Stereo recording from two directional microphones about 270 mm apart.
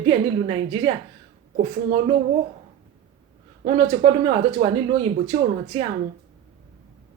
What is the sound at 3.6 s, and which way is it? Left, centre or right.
Speech, right.